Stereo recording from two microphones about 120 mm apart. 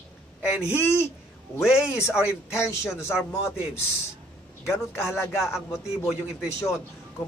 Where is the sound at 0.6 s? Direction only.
20° left (ahead or behind).